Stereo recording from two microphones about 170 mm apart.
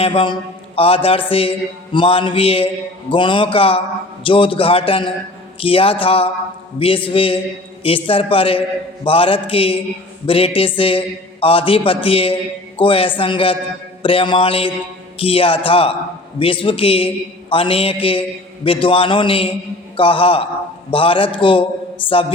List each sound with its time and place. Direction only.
0.0 s a man's voice: 35° left (ahead or behind)